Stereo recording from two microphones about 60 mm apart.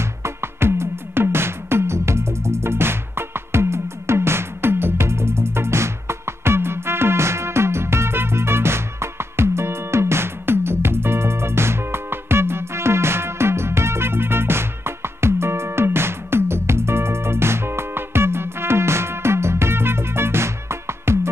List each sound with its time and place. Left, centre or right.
0.2 s music: right